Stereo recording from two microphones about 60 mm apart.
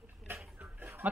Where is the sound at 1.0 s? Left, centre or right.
Right.